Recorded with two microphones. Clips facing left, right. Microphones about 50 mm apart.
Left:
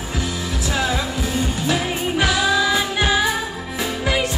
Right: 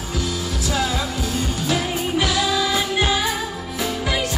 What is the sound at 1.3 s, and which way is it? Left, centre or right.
Music, left.